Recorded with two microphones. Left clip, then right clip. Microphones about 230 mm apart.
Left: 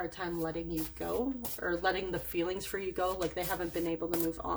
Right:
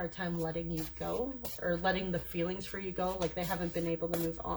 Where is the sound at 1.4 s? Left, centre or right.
Left.